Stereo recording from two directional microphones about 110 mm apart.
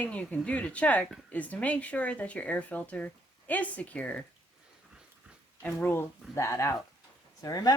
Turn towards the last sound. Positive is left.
turn(degrees=35)  # may be behind; listen again after turning